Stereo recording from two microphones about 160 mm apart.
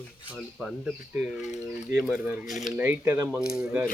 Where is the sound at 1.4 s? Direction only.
45° left (ahead or behind).